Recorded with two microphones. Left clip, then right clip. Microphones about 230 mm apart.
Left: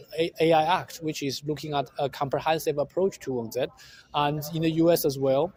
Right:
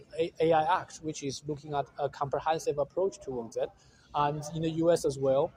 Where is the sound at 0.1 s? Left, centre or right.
Left.